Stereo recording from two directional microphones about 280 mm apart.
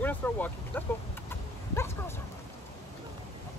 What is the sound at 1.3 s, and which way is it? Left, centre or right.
Dog, centre.